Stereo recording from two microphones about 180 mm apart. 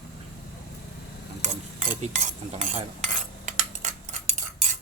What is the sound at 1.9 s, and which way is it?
Cutlery, 40° right (ahead or behind).